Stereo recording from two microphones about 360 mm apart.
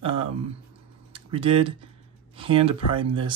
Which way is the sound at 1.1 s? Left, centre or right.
Centre.